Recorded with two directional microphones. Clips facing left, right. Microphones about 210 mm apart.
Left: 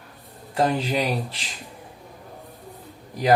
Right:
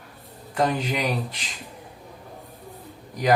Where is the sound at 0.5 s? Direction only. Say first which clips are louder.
Left 2 dB; 30° left (ahead or behind).